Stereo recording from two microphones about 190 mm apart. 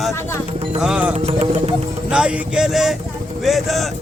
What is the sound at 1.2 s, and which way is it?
Music, 35° right (ahead or behind).